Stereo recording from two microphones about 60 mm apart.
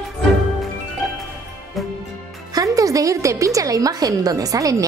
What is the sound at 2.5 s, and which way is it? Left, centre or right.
A woman's voice, right.